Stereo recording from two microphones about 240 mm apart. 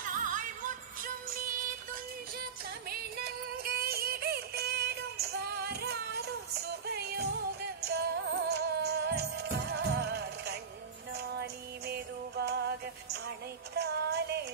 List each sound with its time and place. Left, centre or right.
0.0 s music: right
2.9 s music: right
13.7 s female singing: right